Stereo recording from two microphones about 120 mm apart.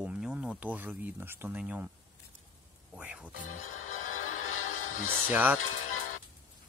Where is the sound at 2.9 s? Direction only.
10° right (ahead or behind).